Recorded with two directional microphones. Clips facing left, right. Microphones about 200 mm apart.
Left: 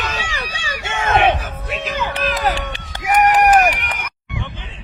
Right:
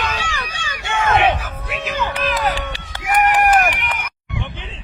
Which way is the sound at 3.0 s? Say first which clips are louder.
Left 2 dB; 40° left (ahead or behind).